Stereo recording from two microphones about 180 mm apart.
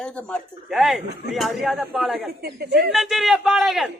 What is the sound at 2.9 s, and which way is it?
Speech, centre (ahead or behind).